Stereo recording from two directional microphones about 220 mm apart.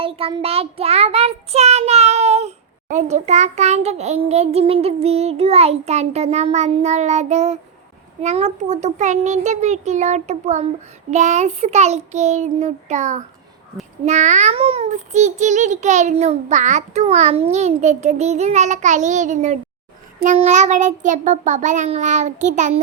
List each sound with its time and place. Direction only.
0.0 s child singing: 25° right (ahead or behind)
2.9 s a child's voice: 30° right (ahead or behind)